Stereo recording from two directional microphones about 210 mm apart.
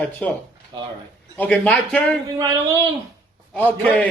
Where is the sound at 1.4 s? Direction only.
5° left (ahead or behind).